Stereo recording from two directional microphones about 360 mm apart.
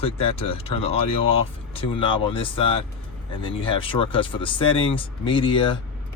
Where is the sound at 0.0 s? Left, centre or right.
Centre.